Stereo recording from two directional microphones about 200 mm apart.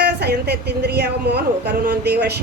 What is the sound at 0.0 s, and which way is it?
A woman's voice, 55° right (ahead or behind).